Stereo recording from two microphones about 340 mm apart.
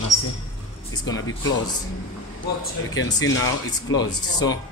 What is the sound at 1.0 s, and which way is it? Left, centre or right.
Speech, left.